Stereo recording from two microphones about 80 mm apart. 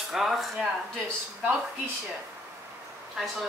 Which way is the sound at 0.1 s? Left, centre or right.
Centre.